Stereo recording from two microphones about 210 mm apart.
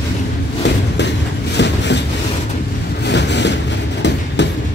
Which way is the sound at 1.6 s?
55° left (ahead or behind).